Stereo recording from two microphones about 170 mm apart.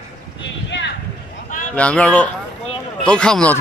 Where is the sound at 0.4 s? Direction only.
90° left.